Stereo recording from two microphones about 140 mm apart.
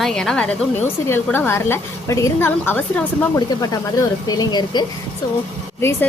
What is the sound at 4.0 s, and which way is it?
Speech, 30° left (ahead or behind).